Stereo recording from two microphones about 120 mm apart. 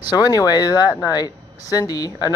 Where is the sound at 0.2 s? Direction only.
30° left (ahead or behind).